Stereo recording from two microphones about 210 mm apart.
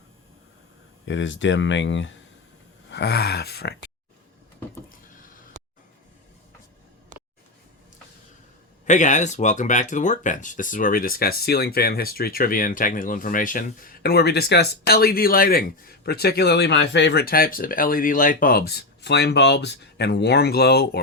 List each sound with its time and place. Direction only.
1.0 s speech: 60° left (ahead or behind)
8.9 s speech: 35° left (ahead or behind)